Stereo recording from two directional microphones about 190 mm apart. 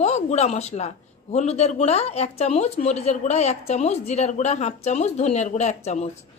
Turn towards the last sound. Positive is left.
turn(degrees=35)  # may be behind; listen again after turning